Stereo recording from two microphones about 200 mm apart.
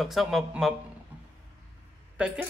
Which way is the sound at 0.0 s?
Centre (ahead or behind).